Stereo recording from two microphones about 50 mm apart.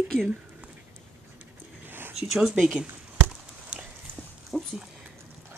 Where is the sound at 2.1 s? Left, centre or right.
Centre.